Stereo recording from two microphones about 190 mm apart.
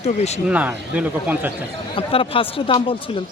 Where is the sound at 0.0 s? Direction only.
35° left (ahead or behind).